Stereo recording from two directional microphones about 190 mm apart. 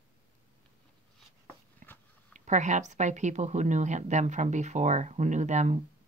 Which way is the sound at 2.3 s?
40° right (ahead or behind).